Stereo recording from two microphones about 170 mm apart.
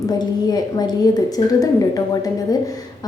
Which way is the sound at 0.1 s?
25° left (ahead or behind).